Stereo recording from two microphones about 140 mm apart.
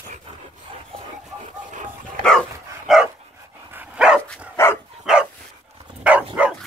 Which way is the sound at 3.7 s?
10° right (ahead or behind).